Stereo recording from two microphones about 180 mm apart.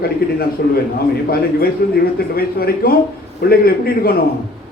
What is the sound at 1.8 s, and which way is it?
Speech, 60° left (ahead or behind).